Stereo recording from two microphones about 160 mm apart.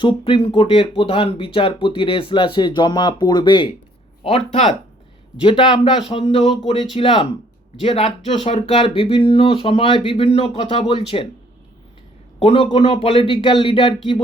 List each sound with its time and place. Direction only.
0.0 s speech: 30° left (ahead or behind)
12.4 s speech: 35° left (ahead or behind)